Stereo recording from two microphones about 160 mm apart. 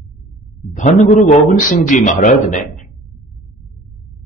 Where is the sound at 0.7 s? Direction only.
50° left (ahead or behind).